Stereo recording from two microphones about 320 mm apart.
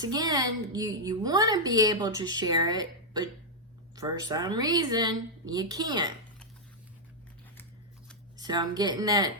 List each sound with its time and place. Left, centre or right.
0.0 s a woman's voice: centre
8.4 s a woman's voice: centre